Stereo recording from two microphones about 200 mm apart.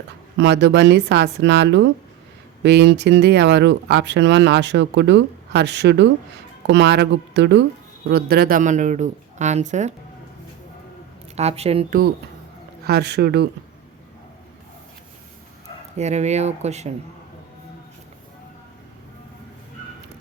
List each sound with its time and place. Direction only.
0.3 s speech: 60° right (ahead or behind); by 9.9 s 35° right (ahead or behind)
11.3 s speech: 30° right (ahead or behind)
11.9 s speech: 45° right (ahead or behind)
16.0 s speech: 35° right (ahead or behind)